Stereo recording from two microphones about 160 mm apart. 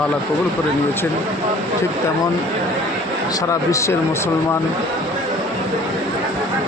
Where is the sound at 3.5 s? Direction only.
20° left (ahead or behind).